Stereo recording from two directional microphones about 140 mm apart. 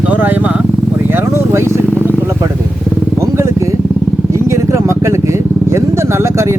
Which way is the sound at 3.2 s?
20° right (ahead or behind).